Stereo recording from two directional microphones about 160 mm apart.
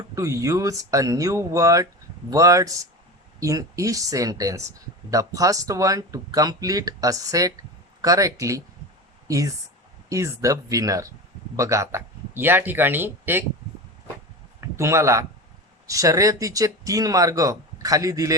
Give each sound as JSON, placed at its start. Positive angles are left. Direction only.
{"t": 0.1, "sound": "speech", "side_deg": -20}
{"t": 14.6, "sound": "a man's voice", "side_deg": -15}